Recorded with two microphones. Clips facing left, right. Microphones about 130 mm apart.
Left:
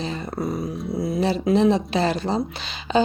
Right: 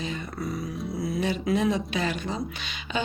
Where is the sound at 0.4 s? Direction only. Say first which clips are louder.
Left 5 dB; 25° left (ahead or behind).